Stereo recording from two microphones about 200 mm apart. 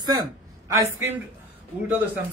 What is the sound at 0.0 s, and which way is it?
A man's voice, 20° right (ahead or behind).